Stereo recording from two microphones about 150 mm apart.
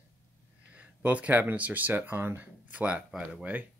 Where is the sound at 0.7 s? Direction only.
10° right (ahead or behind).